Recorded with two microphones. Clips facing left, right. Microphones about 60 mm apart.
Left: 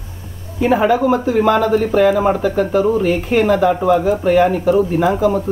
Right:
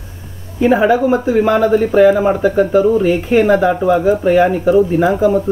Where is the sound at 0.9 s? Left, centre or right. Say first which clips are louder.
Right 2 dB; centre.